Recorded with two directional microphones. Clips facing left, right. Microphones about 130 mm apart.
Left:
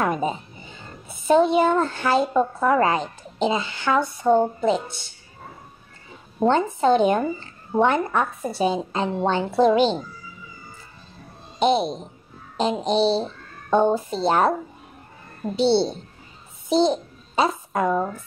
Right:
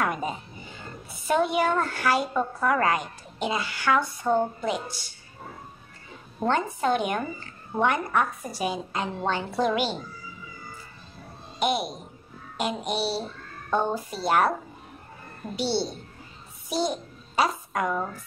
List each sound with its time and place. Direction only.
0.0 s a woman's voice: 25° left (ahead or behind)
6.4 s a woman's voice: 25° left (ahead or behind)
11.6 s a woman's voice: 25° left (ahead or behind)
13.1 s a sound: 20° left (ahead or behind)
13.9 s a woman's voice: 25° left (ahead or behind)
15.5 s a woman's voice: 20° left (ahead or behind)